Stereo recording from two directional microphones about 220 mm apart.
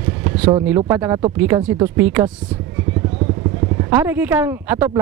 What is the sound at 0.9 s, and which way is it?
Speech, 15° right (ahead or behind).